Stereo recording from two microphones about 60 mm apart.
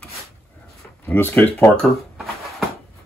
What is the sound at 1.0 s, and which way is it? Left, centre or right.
Speech, left.